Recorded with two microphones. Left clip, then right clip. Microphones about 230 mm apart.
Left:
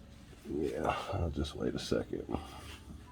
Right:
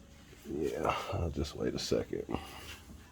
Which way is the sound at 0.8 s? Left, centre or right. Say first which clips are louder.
Right 1 dB; right.